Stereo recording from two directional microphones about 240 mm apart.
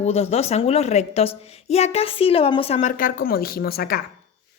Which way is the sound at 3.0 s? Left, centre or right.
Left.